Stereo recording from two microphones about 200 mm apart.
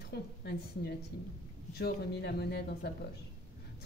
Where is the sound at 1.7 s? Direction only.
55° left (ahead or behind).